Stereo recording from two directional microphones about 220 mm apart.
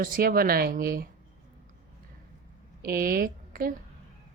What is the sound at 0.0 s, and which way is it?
Speech, 40° right (ahead or behind).